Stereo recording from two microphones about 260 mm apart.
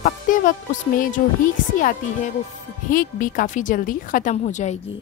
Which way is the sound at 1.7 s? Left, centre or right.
Left.